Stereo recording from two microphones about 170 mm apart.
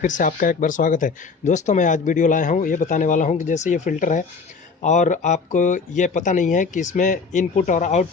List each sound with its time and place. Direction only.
0.0 s speech: 50° left (ahead or behind)